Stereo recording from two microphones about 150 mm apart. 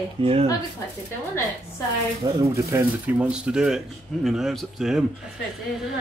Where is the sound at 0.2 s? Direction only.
40° right (ahead or behind).